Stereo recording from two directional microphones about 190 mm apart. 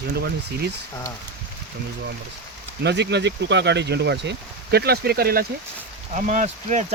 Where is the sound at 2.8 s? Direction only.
65° right (ahead or behind).